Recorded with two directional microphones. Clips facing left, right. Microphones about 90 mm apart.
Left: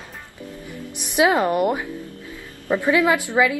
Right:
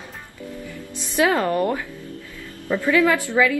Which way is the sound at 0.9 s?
15° left (ahead or behind).